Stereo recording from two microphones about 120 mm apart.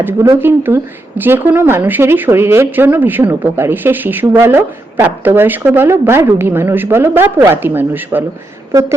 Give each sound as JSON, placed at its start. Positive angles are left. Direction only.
{"t": 0.0, "sound": "a woman's voice", "side_deg": -20}